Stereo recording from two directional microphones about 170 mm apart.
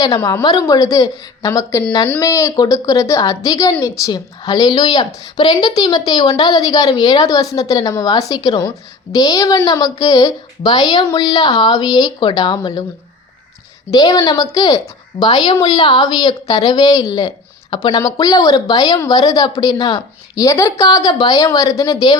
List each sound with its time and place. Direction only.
0.0 s a woman's voice: 20° left (ahead or behind)
13.9 s a woman's voice: 20° left (ahead or behind)